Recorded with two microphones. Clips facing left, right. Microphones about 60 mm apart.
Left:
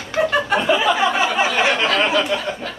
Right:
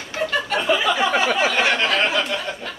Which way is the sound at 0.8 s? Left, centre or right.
Left.